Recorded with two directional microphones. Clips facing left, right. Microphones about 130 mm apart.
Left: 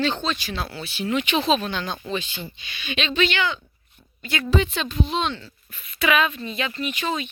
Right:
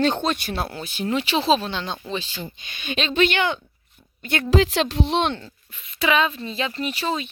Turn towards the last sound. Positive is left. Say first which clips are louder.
# right 1 dB
turn(degrees=-35)  # may be behind; listen again after turning